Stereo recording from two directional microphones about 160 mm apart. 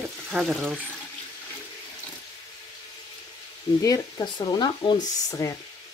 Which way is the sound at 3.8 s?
25° left (ahead or behind).